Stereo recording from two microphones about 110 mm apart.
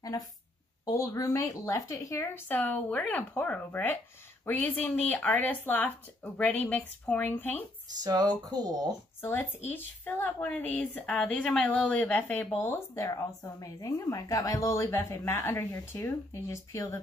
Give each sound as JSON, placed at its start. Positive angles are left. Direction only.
{"t": 0.8, "sound": "a woman's voice", "side_deg": 25}
{"t": 8.0, "sound": "speech", "side_deg": -40}
{"t": 9.7, "sound": "a woman's voice", "side_deg": 20}